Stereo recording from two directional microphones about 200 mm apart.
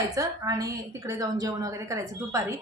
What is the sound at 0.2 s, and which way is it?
A woman's voice, 15° right (ahead or behind).